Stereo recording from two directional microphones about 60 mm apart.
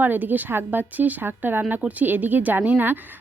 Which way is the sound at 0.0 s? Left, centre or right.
Right.